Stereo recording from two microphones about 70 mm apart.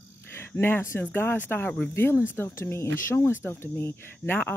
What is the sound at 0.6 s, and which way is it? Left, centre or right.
Speech, left.